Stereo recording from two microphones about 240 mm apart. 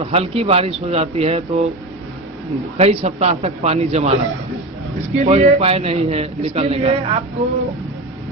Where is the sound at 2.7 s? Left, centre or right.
Right.